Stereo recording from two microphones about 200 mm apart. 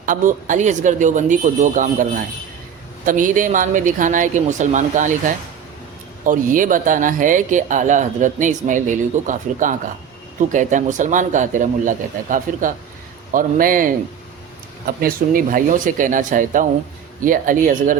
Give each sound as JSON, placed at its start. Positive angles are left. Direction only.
{"t": 0.0, "sound": "a man's voice", "side_deg": -40}